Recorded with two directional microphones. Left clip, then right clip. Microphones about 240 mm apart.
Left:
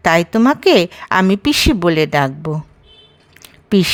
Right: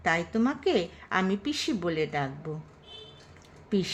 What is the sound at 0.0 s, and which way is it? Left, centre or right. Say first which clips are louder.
A woman's voice: left 14 dB; left.